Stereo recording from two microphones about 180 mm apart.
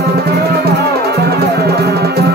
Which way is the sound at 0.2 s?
60° right (ahead or behind).